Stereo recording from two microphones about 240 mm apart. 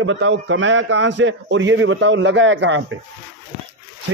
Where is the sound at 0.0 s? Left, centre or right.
Right.